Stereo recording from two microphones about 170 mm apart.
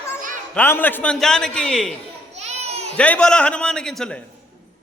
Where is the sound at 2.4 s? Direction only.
40° right (ahead or behind).